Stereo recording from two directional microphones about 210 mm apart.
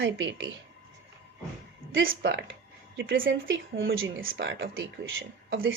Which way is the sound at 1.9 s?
65° right (ahead or behind).